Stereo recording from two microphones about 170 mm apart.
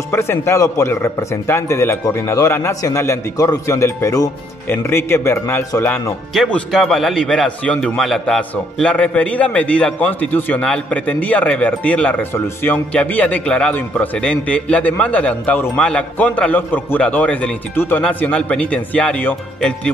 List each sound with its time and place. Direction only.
0.1 s a man's voice: 15° left (ahead or behind)
6.3 s a man's voice: centre (ahead or behind)